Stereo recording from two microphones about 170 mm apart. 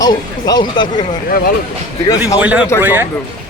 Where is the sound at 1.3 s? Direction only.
60° left (ahead or behind).